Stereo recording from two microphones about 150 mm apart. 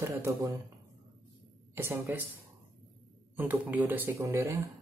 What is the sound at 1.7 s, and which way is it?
Speech, 15° right (ahead or behind).